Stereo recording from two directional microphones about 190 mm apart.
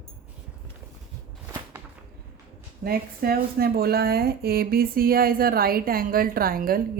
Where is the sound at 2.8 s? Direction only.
50° right (ahead or behind).